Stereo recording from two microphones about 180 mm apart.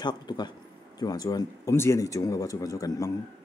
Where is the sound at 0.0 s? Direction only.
25° left (ahead or behind).